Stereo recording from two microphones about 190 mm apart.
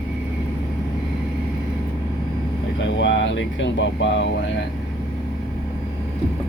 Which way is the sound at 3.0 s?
70° left (ahead or behind).